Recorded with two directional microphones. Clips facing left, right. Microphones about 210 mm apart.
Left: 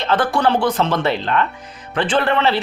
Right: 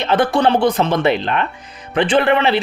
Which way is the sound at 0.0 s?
15° right (ahead or behind).